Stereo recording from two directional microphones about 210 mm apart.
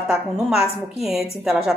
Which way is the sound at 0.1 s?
Centre (ahead or behind).